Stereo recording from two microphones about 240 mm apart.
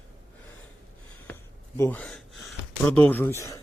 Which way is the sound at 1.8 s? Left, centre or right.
Centre.